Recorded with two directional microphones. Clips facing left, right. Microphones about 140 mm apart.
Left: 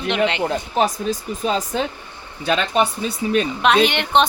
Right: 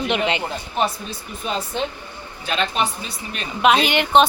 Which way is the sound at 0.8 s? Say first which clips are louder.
Left 3 dB; 40° left (ahead or behind).